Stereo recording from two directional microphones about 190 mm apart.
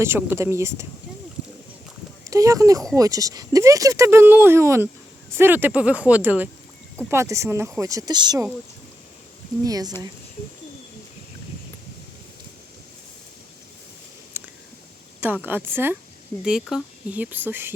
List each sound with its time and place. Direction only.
0.0 s speech: 10° right (ahead or behind)
2.3 s speech: 15° right (ahead or behind)
9.6 s speech: 20° right (ahead or behind)
14.3 s a sound: 10° right (ahead or behind)
15.2 s speech: 10° right (ahead or behind)